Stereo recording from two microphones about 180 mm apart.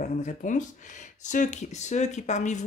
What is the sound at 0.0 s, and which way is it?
Speech, 40° left (ahead or behind).